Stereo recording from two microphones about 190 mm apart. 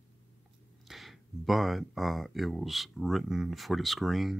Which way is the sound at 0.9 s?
Centre (ahead or behind).